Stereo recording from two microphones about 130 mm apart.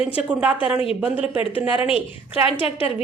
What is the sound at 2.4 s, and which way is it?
Speech, 45° left (ahead or behind).